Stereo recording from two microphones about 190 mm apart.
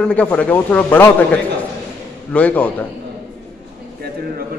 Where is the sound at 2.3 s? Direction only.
5° left (ahead or behind).